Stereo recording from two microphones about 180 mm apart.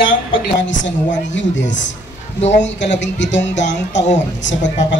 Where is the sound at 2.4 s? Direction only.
40° left (ahead or behind).